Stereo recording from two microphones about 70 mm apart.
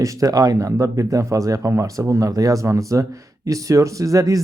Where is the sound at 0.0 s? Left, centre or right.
Right.